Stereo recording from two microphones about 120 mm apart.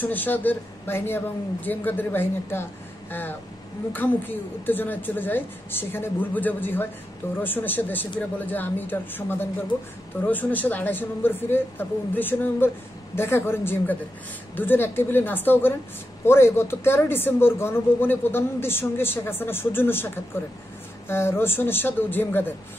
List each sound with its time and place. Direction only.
0.0 s a woman's voice: 15° left (ahead or behind)
3.1 s a sound: 15° left (ahead or behind)
3.9 s a woman's voice: 15° left (ahead or behind)